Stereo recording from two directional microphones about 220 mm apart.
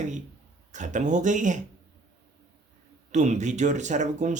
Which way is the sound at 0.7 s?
35° right (ahead or behind).